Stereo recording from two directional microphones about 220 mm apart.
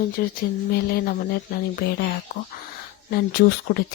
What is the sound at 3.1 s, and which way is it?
Speech, 45° left (ahead or behind).